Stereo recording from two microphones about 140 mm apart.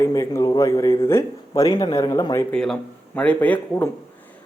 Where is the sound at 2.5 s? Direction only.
5° left (ahead or behind).